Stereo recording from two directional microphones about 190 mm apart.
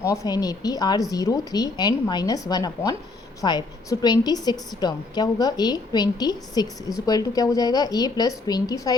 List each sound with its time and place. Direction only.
0.0 s a woman's voice: 20° left (ahead or behind)